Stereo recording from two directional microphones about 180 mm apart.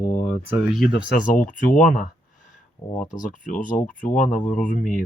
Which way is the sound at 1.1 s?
50° left (ahead or behind).